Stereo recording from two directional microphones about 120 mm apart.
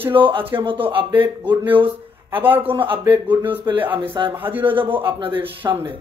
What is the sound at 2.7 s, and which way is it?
Speech, 45° right (ahead or behind).